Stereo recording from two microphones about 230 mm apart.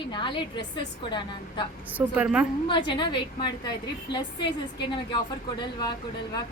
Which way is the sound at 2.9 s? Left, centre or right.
Centre.